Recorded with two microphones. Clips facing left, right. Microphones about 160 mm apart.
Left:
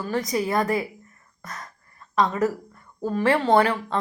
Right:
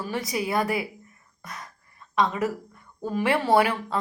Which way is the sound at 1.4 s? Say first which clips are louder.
Left 2 dB; centre (ahead or behind).